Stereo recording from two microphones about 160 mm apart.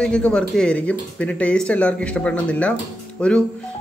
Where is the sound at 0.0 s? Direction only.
5° left (ahead or behind).